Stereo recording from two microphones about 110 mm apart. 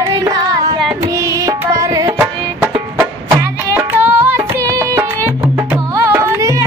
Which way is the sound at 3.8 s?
20° right (ahead or behind).